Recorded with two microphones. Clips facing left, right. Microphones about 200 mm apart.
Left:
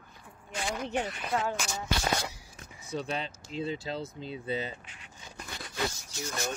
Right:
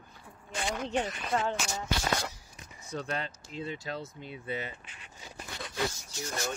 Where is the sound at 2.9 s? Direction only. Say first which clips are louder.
Left 1 dB; 20° left (ahead or behind).